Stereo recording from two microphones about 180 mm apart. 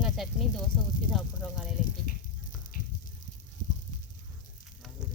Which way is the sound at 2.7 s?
55° left (ahead or behind).